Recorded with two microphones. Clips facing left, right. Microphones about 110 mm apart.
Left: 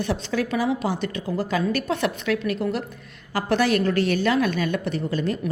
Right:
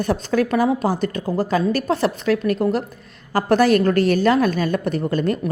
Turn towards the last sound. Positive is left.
turn(degrees=-50)  # may be behind; listen again after turning